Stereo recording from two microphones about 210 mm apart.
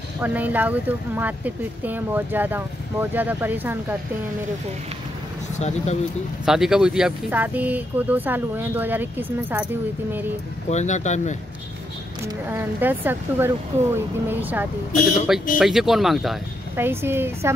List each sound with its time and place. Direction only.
0.2 s speech: 10° right (ahead or behind)
5.6 s speech: 30° left (ahead or behind)
6.4 s speech: centre (ahead or behind)
10.7 s speech: 35° left (ahead or behind)
12.3 s speech: 10° right (ahead or behind)
16.7 s speech: 10° right (ahead or behind)